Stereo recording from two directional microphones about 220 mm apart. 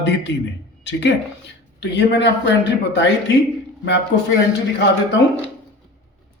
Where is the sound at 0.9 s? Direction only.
55° left (ahead or behind).